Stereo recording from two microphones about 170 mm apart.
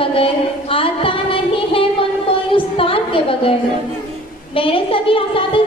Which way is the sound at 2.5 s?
30° left (ahead or behind).